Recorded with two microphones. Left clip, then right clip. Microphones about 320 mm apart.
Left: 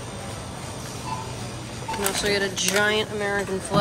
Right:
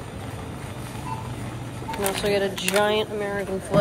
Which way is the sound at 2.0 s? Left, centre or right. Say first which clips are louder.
Right 1 dB; centre.